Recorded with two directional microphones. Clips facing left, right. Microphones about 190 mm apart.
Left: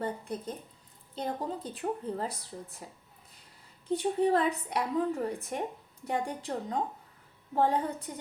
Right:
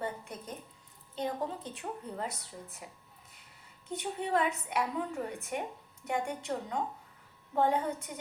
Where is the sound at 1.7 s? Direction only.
35° left (ahead or behind).